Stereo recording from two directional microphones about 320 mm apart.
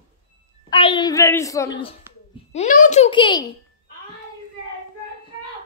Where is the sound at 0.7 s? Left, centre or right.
Centre.